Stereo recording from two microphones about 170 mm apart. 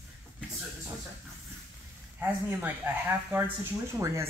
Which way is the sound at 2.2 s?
10° right (ahead or behind).